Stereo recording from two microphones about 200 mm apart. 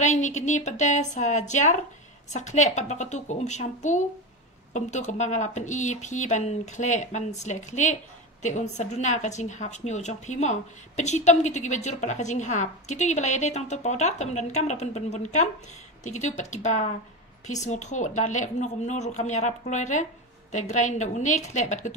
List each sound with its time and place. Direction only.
0.0 s speech: 35° left (ahead or behind)